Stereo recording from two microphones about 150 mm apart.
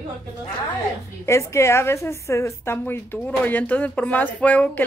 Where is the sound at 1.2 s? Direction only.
20° left (ahead or behind).